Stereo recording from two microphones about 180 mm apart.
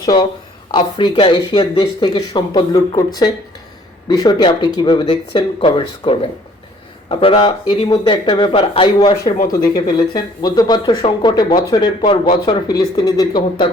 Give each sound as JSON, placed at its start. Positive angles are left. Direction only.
{"t": 0.0, "sound": "speech", "side_deg": 25}